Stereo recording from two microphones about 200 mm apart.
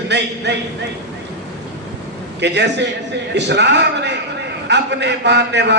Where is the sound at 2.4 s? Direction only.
60° right (ahead or behind).